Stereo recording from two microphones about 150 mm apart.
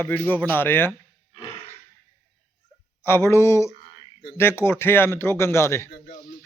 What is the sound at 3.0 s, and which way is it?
Speech, 15° left (ahead or behind).